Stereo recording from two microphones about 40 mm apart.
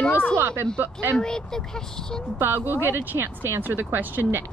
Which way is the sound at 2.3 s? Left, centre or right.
Right.